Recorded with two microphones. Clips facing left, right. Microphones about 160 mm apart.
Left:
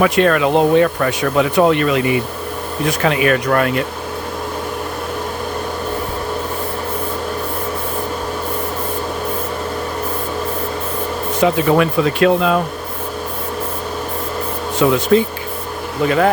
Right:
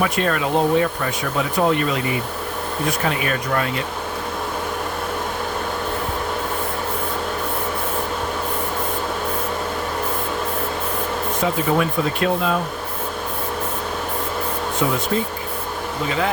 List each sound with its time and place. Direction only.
0.0 s speech: 75° left (ahead or behind)
11.3 s speech: 80° left
14.8 s speech: 90° left
16.0 s speech: 55° left (ahead or behind)